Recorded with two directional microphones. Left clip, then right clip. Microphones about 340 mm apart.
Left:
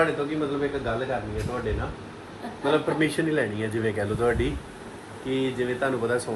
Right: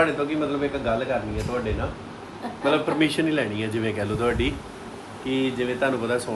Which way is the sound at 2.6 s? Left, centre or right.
Centre.